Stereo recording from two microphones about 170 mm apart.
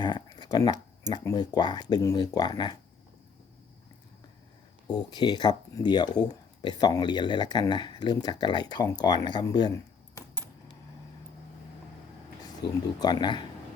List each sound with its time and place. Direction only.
0.0 s a sound: 25° left (ahead or behind)
1.1 s speech: 20° left (ahead or behind)
4.9 s speech: 25° left (ahead or behind)
12.6 s speech: 25° left (ahead or behind)